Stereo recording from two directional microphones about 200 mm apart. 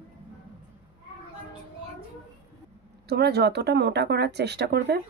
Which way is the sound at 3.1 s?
55° right (ahead or behind).